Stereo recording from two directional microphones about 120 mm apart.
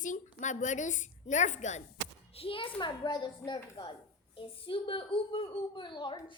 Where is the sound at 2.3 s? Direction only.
50° left (ahead or behind).